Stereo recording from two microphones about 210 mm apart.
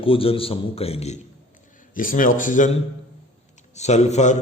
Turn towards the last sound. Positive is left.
turn(degrees=35)  # may be behind; listen again after turning